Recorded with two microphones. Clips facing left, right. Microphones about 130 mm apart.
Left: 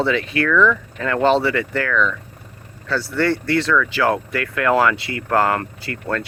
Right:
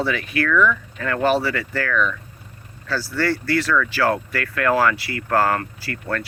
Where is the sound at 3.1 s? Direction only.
25° left (ahead or behind).